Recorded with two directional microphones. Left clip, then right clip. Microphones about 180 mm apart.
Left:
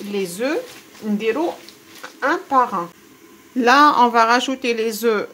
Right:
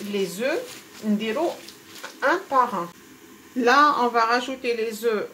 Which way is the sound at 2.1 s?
50° left (ahead or behind).